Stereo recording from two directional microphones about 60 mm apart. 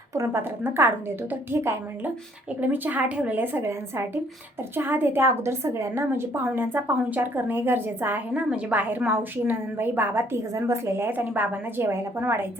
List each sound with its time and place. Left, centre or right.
0.3 s a woman's voice: right
2.6 s a woman's voice: right
3.4 s a woman's voice: right
8.3 s a woman's voice: centre
9.0 s a woman's voice: right
10.3 s a woman's voice: right